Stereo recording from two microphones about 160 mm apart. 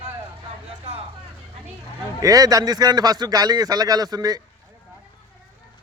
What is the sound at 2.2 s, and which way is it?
A man's voice, 20° right (ahead or behind).